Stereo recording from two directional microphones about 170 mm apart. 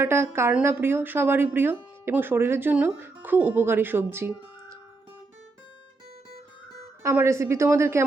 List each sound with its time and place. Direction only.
0.0 s speech: 15° right (ahead or behind)
7.0 s speech: 15° right (ahead or behind)